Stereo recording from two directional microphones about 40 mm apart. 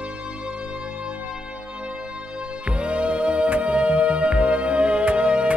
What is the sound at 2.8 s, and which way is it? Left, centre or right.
Music, right.